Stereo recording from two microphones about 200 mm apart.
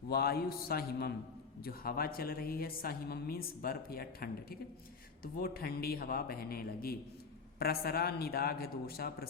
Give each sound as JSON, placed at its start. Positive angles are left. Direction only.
{"t": 0.1, "sound": "a woman's voice", "side_deg": 50}